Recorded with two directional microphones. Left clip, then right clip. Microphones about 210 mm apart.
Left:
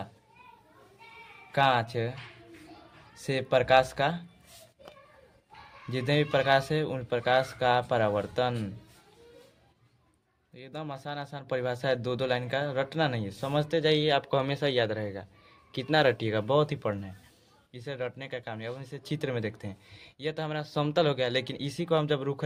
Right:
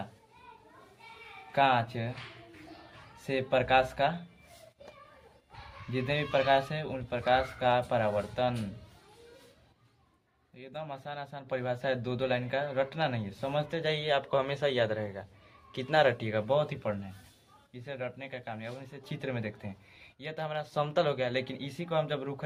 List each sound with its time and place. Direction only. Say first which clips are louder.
1.5 s speech: left 1 dB; 60° left (ahead or behind)
3.2 s speech: left 3 dB; 55° left (ahead or behind)
5.9 s speech: left 3 dB; 60° left (ahead or behind)
10.5 s speech: left 1 dB; 55° left (ahead or behind)